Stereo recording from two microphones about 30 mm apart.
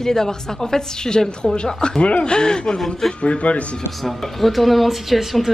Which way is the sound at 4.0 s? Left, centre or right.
Centre.